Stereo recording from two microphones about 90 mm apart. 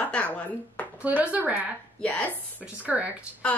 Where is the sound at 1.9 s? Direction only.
15° left (ahead or behind).